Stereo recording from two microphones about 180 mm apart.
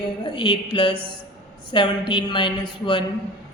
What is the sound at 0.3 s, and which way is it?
Speech, 25° left (ahead or behind).